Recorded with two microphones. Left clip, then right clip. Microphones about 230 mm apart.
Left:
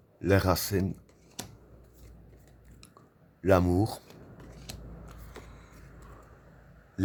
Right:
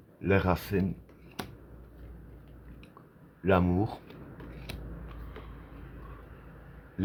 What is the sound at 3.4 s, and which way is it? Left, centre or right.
Speech, left.